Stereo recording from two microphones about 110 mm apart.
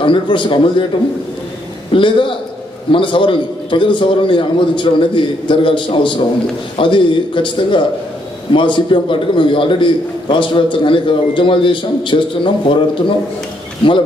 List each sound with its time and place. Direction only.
0.0 s a man's voice: 50° left (ahead or behind)
1.9 s a man's voice: 50° left (ahead or behind)